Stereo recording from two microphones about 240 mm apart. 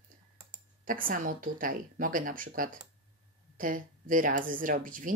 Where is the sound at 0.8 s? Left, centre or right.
Right.